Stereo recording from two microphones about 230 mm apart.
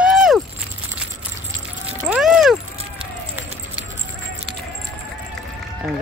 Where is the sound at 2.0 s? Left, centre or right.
Centre.